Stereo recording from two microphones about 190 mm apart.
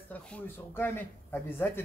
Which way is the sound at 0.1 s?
5° left (ahead or behind).